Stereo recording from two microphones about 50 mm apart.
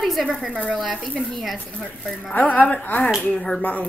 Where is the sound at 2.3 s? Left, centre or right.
Left.